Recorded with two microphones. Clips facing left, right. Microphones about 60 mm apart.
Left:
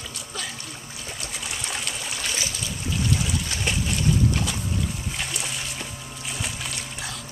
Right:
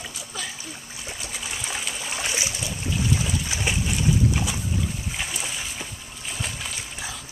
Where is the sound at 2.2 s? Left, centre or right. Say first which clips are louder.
Right 3 dB; centre.